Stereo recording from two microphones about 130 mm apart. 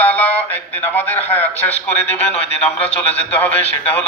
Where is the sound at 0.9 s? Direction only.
15° left (ahead or behind).